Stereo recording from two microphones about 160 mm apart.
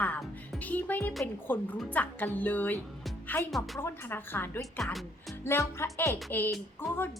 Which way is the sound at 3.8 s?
15° left (ahead or behind).